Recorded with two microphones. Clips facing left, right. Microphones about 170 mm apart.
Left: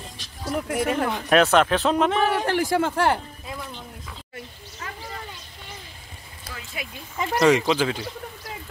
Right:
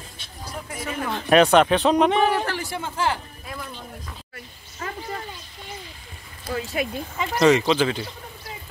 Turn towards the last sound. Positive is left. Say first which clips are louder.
# right 1 dB
turn(degrees=10)  # may be behind; listen again after turning